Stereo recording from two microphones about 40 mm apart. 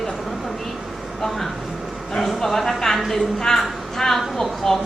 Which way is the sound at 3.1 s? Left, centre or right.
Centre.